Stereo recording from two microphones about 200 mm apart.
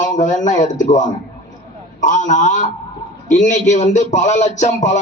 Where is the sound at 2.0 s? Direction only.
40° left (ahead or behind).